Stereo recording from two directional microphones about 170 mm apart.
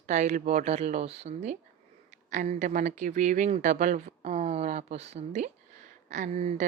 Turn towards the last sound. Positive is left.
turn(degrees=-45)  # may be behind; listen again after turning